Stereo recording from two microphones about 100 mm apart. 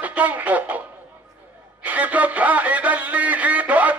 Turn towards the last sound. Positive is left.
turn(degrees=-15)  # may be behind; listen again after turning